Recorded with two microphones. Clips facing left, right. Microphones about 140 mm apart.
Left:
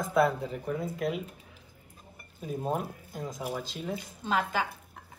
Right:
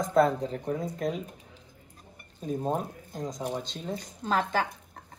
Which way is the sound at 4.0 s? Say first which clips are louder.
Right 3 dB; 40° right (ahead or behind).